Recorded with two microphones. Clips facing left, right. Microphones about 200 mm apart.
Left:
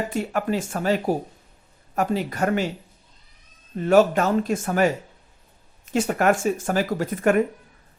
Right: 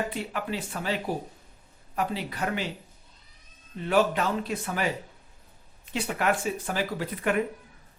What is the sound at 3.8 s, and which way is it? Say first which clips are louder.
Speech: left 7 dB; 45° left (ahead or behind).